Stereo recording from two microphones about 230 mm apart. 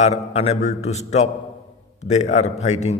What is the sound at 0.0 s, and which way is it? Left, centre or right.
A man's voice, left.